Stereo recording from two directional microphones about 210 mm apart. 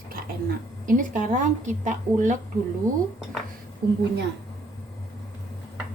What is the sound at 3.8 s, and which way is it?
Speech, 45° right (ahead or behind).